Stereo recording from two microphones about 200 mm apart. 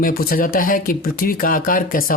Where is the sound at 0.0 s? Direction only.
45° left (ahead or behind).